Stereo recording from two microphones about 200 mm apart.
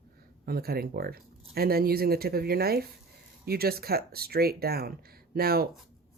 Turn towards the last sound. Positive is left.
turn(degrees=-50)  # may be behind; listen again after turning